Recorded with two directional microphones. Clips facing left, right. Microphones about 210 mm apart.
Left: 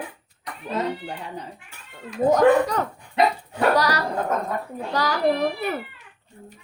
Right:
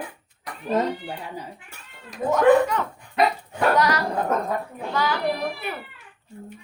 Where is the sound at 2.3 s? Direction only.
40° left (ahead or behind).